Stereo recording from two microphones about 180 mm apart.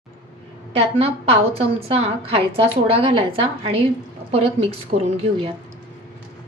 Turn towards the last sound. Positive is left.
turn(degrees=-35)  # may be behind; listen again after turning